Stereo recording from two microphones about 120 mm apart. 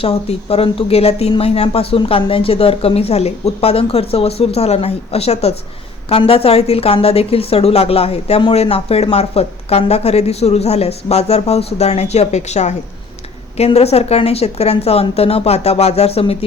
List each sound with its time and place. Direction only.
0.0 s speech: 55° left (ahead or behind); by 12.7 s 70° left (ahead or behind)
13.6 s speech: 60° left (ahead or behind)